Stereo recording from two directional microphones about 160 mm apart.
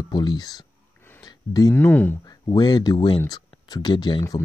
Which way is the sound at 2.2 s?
25° left (ahead or behind).